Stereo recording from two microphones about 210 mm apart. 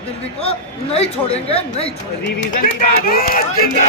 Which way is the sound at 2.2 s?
55° left (ahead or behind).